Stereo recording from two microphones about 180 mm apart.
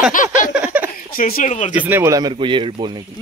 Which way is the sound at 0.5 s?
10° right (ahead or behind).